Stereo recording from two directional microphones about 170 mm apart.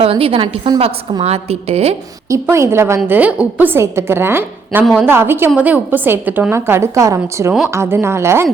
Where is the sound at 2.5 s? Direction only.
15° right (ahead or behind).